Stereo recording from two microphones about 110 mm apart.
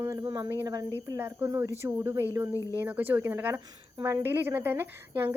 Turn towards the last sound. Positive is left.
turn(degrees=-20)  # may be behind; listen again after turning